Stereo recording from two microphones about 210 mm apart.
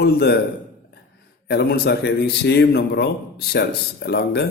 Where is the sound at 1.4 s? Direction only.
50° left (ahead or behind).